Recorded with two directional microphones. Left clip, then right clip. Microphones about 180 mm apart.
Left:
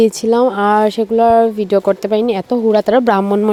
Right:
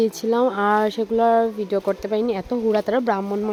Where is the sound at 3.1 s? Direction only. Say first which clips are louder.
Left 10 dB; 45° left (ahead or behind).